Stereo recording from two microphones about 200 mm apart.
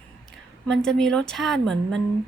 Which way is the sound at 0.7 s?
Centre (ahead or behind).